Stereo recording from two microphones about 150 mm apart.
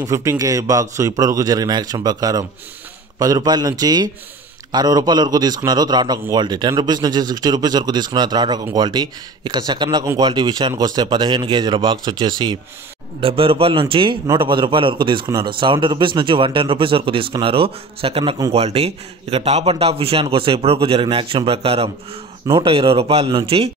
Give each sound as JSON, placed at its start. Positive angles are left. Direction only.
{"t": 0.0, "sound": "a man's voice", "side_deg": -20}